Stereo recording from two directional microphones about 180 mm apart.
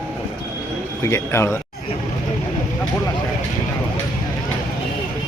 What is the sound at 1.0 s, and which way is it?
Speech, 15° left (ahead or behind).